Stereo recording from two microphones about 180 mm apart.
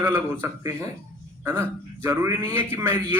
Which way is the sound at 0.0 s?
15° right (ahead or behind).